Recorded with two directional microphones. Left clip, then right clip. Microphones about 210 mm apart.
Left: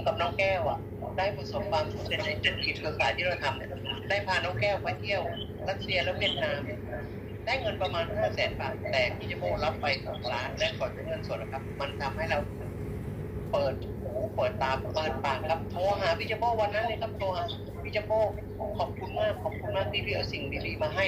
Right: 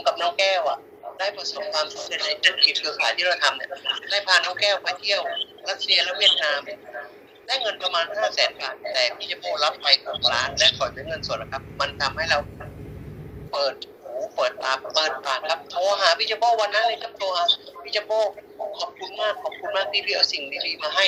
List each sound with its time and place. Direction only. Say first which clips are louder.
0.0 s a man's voice: right 7 dB; 50° right (ahead or behind)
13.5 s a man's voice: right 4 dB; 50° right (ahead or behind)